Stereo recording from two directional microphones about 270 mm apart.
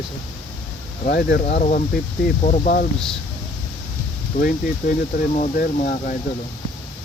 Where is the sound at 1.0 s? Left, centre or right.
Left.